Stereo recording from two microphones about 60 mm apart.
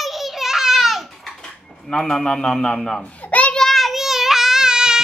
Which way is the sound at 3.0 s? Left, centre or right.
Left.